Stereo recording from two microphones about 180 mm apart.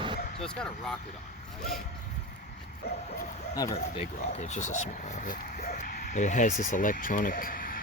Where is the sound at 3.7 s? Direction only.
35° left (ahead or behind).